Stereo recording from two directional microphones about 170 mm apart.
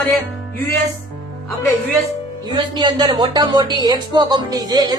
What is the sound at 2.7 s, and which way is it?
A woman's voice, 25° right (ahead or behind).